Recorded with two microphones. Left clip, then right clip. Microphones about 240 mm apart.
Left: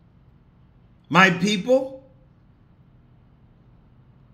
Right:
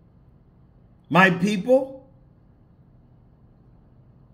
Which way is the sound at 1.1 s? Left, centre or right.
Centre.